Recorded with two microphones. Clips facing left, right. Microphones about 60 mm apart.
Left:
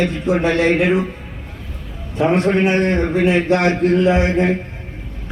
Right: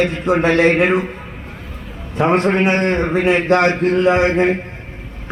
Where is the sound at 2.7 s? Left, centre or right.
Right.